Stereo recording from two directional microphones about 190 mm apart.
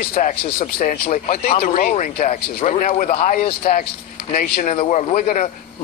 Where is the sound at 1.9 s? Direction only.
45° left (ahead or behind).